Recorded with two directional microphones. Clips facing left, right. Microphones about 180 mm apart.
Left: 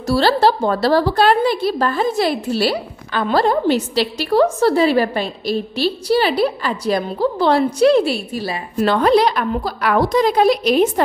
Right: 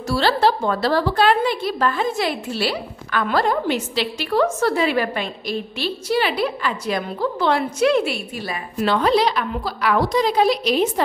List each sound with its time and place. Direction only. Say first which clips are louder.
0.1 s a woman's voice: left 4 dB; 35° left (ahead or behind)